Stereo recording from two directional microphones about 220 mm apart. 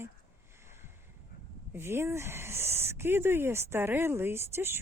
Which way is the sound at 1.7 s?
10° right (ahead or behind).